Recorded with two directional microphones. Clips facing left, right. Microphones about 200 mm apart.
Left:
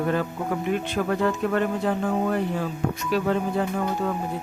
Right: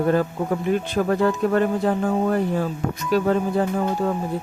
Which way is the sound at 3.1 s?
40° right (ahead or behind).